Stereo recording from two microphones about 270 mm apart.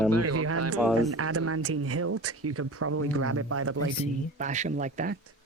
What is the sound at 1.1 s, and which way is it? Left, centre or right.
Speech, right.